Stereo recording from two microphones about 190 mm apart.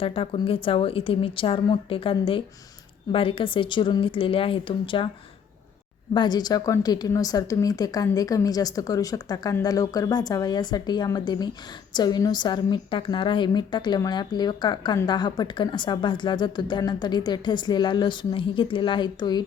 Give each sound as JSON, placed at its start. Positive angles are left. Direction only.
{"t": 0.0, "sound": "a woman's voice", "side_deg": 30}
{"t": 6.1, "sound": "a woman's voice", "side_deg": 20}